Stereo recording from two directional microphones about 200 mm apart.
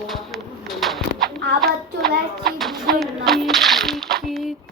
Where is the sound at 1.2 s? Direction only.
50° right (ahead or behind).